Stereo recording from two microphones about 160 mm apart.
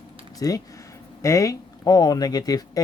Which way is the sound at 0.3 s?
20° left (ahead or behind).